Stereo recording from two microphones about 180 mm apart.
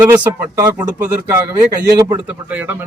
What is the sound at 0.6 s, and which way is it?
A man's voice, 15° right (ahead or behind).